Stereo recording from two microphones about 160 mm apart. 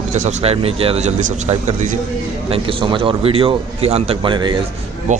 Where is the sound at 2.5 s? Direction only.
30° right (ahead or behind).